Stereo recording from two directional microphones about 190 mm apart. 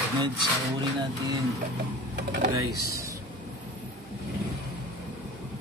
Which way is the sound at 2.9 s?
15° right (ahead or behind).